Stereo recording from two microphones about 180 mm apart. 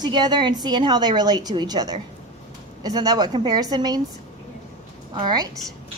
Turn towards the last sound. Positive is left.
turn(degrees=-25)  # may be behind; listen again after turning